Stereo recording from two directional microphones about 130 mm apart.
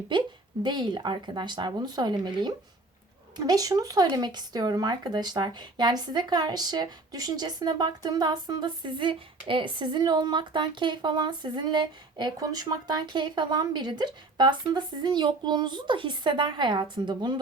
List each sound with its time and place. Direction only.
0.6 s speech: 35° right (ahead or behind)